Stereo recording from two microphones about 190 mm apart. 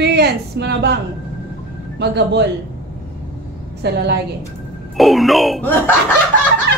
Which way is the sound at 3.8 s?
65° right (ahead or behind).